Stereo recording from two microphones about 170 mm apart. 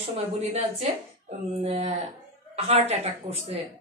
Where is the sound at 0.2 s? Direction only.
35° right (ahead or behind).